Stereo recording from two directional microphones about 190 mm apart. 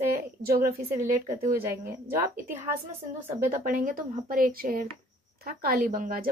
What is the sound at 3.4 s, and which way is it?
A woman's voice, 45° right (ahead or behind).